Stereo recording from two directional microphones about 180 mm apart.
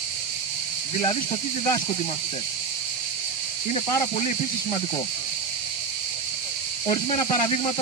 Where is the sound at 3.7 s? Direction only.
35° left (ahead or behind).